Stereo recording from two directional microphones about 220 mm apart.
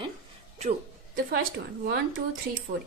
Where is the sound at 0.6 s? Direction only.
30° right (ahead or behind).